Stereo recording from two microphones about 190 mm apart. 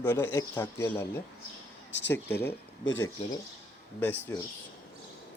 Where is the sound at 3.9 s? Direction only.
10° left (ahead or behind).